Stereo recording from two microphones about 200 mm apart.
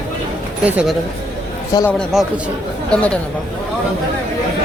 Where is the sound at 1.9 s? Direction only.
Centre (ahead or behind).